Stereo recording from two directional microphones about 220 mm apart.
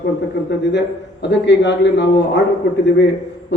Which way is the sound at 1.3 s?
50° left (ahead or behind).